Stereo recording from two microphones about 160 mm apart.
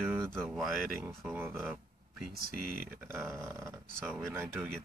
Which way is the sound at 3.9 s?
5° left (ahead or behind).